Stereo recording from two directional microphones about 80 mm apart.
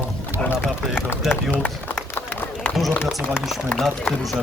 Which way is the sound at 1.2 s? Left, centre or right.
Centre.